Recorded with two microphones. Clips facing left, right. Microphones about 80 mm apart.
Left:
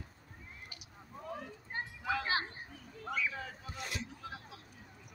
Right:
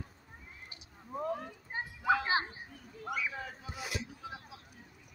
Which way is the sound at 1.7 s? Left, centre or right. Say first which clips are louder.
Right 6 dB; centre.